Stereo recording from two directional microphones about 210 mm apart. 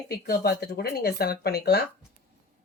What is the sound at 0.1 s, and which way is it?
Speech, 50° left (ahead or behind).